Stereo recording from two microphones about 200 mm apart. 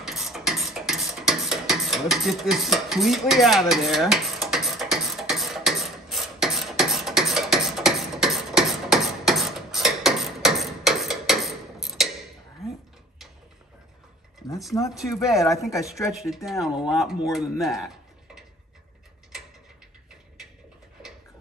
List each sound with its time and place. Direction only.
0.0 s a sound: centre (ahead or behind)
15.3 s speech: 15° left (ahead or behind)
16.1 s speech: centre (ahead or behind)